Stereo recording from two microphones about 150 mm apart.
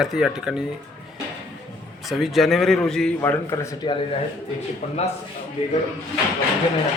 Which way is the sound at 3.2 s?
20° left (ahead or behind).